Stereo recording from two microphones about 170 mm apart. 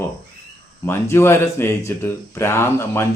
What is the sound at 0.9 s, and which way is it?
Speech, 15° left (ahead or behind).